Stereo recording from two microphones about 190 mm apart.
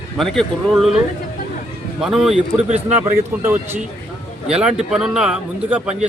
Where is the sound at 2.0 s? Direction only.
Centre (ahead or behind).